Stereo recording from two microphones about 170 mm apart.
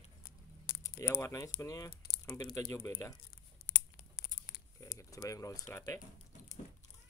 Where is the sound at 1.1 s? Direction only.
20° left (ahead or behind).